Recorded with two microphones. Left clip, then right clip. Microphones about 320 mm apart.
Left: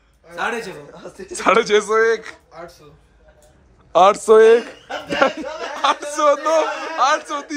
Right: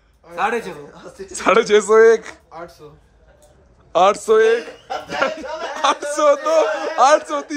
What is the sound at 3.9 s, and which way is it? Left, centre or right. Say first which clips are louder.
Speech: left 2 dB; centre.